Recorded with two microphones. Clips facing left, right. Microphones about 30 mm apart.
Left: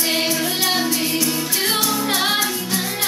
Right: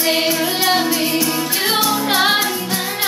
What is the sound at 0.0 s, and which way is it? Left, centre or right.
Music, centre.